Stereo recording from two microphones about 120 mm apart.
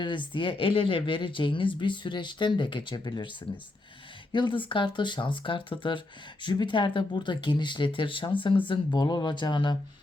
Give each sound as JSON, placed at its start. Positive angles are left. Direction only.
{"t": 0.0, "sound": "speech", "side_deg": 40}
{"t": 4.3, "sound": "speech", "side_deg": 40}